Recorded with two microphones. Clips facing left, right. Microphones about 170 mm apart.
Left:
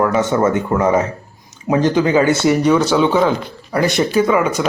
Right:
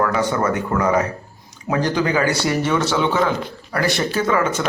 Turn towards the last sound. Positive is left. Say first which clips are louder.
# left 5 dB
turn(degrees=15)  # may be behind; listen again after turning